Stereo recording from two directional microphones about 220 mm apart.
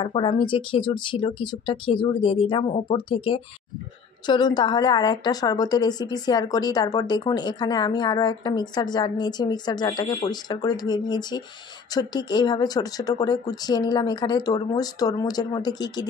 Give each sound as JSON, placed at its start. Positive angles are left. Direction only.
{"t": 0.0, "sound": "a woman's voice", "side_deg": 25}
{"t": 4.3, "sound": "a woman's voice", "side_deg": 20}